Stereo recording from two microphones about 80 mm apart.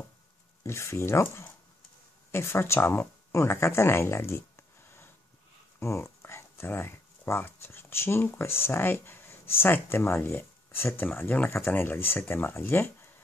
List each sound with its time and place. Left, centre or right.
0.7 s speech: left